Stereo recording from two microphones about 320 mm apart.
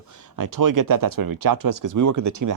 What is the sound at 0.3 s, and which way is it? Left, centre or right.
Speech, right.